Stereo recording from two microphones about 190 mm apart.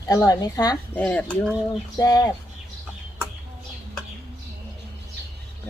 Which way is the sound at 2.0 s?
20° left (ahead or behind).